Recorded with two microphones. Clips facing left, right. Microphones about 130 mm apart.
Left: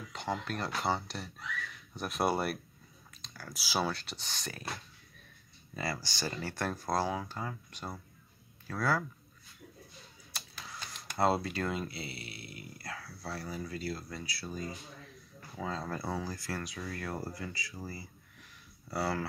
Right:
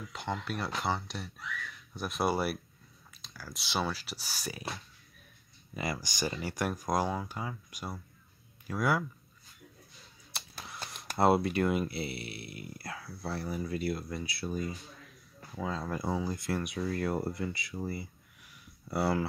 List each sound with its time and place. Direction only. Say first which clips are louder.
0.1 s speech: left 1 dB; centre (ahead or behind)
5.8 s speech: right 2 dB; 15° right (ahead or behind)
10.3 s a sound: right 2 dB; 25° right (ahead or behind)
11.0 s speech: right 4 dB; 25° right (ahead or behind)
12.0 s speech: right 6 dB; 25° left (ahead or behind)
12.3 s speech: right 4 dB; 25° right (ahead or behind)
15.6 s speech: right 2 dB; centre (ahead or behind)
15.9 s speech: right 4 dB; 15° right (ahead or behind)